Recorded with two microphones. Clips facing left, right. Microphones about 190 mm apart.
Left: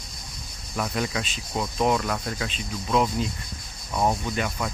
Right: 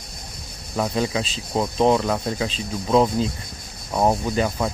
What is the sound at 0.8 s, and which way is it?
Speech, 25° right (ahead or behind).